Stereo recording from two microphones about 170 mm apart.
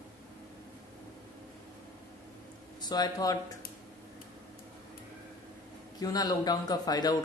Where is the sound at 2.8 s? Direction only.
25° left (ahead or behind).